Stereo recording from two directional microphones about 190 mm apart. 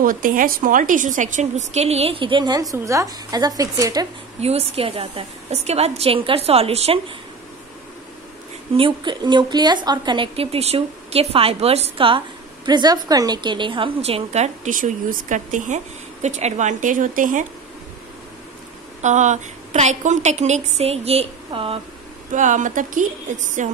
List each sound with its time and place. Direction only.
0.0 s a woman's voice: 45° right (ahead or behind); by 4.1 s 20° right (ahead or behind)
4.4 s a woman's voice: 35° right (ahead or behind)
8.7 s a woman's voice: 25° right (ahead or behind); by 17.5 s 45° right (ahead or behind)
18.9 s a woman's voice: 40° right (ahead or behind)
22.3 s a woman's voice: 40° right (ahead or behind)